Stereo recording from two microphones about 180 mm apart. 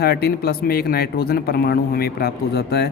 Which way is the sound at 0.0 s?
60° left (ahead or behind).